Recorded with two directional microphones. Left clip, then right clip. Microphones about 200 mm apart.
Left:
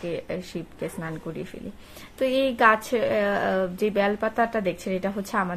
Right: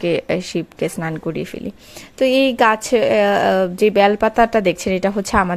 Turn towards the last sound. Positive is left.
turn(degrees=-45)  # may be behind; listen again after turning